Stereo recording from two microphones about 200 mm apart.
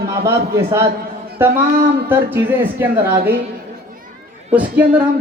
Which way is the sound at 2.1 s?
10° right (ahead or behind).